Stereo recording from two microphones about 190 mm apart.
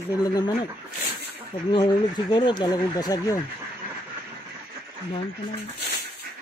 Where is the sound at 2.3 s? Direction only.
25° left (ahead or behind).